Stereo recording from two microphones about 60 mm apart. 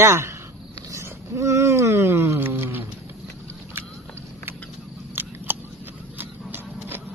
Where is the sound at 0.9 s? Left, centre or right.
Right.